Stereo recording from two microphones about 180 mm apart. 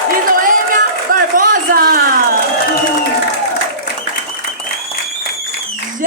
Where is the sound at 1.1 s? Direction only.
50° right (ahead or behind).